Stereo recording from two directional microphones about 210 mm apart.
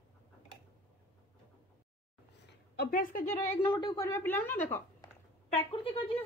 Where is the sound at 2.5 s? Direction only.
45° left (ahead or behind).